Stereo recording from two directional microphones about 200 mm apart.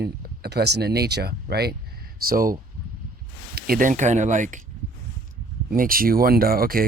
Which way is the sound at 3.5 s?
45° right (ahead or behind).